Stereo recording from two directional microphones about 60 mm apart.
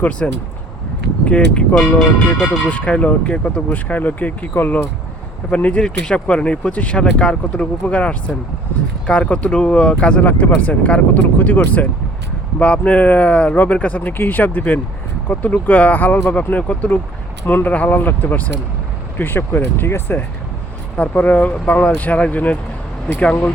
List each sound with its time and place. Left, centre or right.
0.2 s speech: left
5.5 s speech: left
10.2 s speech: left
11.2 s speech: left
20.9 s speech: left